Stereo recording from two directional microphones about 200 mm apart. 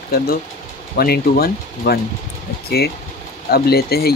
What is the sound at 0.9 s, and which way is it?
Speech, 50° left (ahead or behind).